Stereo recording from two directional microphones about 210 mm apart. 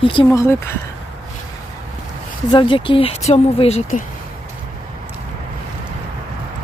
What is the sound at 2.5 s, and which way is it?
Speech, 25° left (ahead or behind).